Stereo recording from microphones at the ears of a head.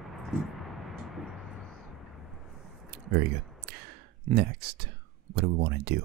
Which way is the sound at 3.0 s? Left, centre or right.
Right.